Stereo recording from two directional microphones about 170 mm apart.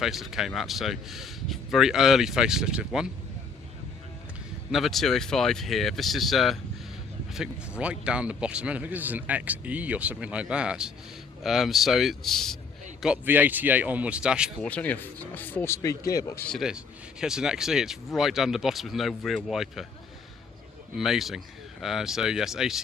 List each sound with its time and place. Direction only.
0.0 s speech: centre (ahead or behind)
4.7 s a man's voice: centre (ahead or behind)
14.6 s speech: 10° left (ahead or behind)
16.5 s speech: 5° right (ahead or behind)
21.0 s speech: centre (ahead or behind)